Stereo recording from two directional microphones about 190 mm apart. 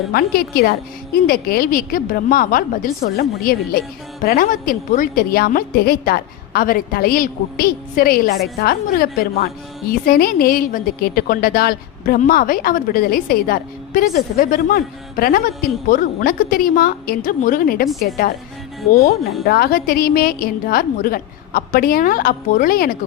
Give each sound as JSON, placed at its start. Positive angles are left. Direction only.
{"t": 0.1, "sound": "a woman's voice", "side_deg": 55}